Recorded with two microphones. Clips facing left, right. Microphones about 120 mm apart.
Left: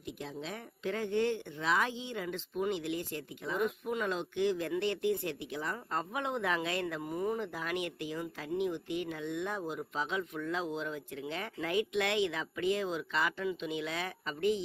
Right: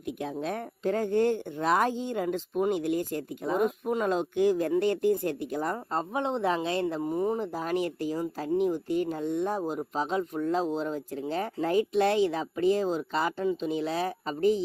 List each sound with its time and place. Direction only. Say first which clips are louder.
0.2 s speech: right 10 dB; 50° right (ahead or behind); by 14.6 s 35° right (ahead or behind)